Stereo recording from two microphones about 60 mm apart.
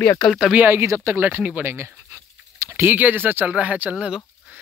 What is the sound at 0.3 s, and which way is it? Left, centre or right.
Speech, centre.